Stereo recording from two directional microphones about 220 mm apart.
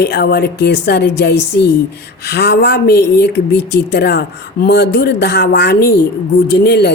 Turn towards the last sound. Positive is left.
turn(degrees=50)  # may be behind; listen again after turning